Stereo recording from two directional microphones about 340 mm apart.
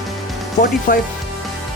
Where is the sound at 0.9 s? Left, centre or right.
Left.